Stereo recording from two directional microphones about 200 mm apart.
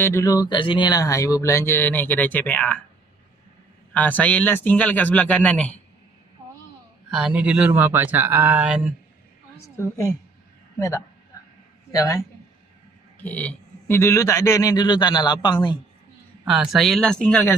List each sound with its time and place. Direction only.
0.0 s speech: 15° left (ahead or behind)
3.9 s speech: 5° left (ahead or behind)
7.1 s speech: 5° right (ahead or behind)
9.8 s speech: 15° left (ahead or behind)
13.2 s speech: 5° left (ahead or behind); by 15.8 s 25° left (ahead or behind)
16.4 s speech: centre (ahead or behind)